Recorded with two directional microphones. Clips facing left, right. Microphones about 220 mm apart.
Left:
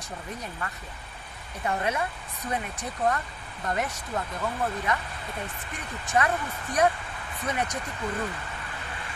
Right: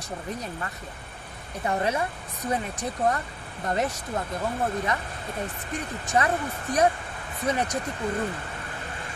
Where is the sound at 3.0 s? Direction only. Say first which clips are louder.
Even; 30° right (ahead or behind).